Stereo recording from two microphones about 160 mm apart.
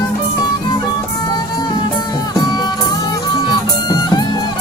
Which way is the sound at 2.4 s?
25° left (ahead or behind).